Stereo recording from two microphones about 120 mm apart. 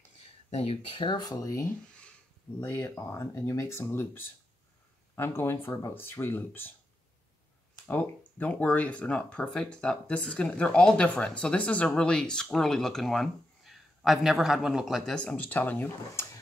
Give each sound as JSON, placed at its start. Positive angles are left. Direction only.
{"t": 0.5, "sound": "speech", "side_deg": 55}
{"t": 1.0, "sound": "speech", "side_deg": 40}
{"t": 1.7, "sound": "a sound", "side_deg": 10}
{"t": 2.6, "sound": "speech", "side_deg": 20}
{"t": 7.8, "sound": "speech", "side_deg": 15}